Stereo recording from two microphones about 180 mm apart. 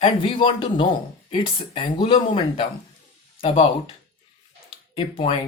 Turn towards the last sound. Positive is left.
turn(degrees=30)  # may be behind; listen again after turning